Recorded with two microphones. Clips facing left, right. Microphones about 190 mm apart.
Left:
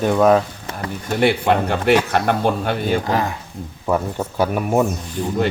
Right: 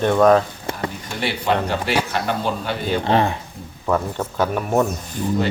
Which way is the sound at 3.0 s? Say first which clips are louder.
Right 3 dB; 25° right (ahead or behind).